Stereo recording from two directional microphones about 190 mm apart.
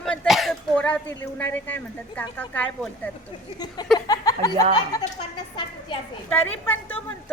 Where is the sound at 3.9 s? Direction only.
20° left (ahead or behind).